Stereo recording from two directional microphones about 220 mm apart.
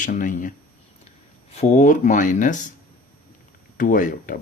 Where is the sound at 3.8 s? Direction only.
35° left (ahead or behind).